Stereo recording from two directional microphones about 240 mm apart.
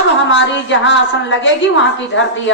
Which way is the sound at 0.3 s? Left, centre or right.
Left.